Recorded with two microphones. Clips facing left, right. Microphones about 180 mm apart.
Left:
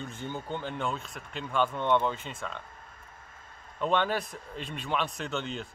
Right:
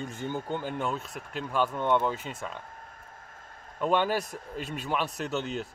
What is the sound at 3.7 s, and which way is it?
Speech, 10° right (ahead or behind).